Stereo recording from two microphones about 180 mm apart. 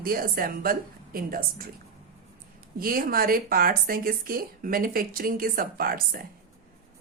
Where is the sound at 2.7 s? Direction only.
55° right (ahead or behind).